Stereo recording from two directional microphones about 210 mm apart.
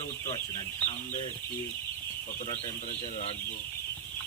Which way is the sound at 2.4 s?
30° left (ahead or behind).